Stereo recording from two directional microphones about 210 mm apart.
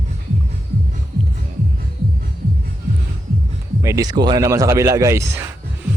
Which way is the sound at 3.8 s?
15° right (ahead or behind).